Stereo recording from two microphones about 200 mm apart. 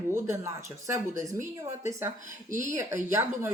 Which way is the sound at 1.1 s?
40° right (ahead or behind).